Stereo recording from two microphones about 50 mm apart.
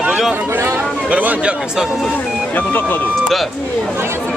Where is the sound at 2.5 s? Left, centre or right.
Left.